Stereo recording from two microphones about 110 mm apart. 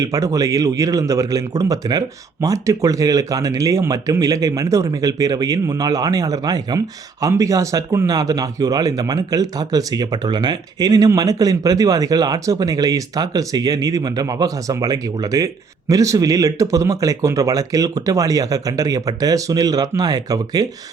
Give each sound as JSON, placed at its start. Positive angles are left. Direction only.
{"t": 0.0, "sound": "speech", "side_deg": -30}